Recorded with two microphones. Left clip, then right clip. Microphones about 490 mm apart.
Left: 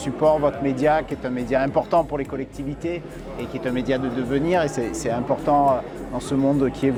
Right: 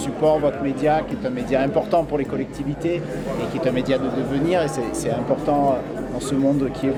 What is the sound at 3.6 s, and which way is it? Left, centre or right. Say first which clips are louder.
Speech: right 2 dB; left.